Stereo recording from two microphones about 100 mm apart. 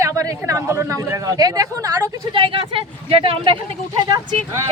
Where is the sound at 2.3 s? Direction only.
60° right (ahead or behind).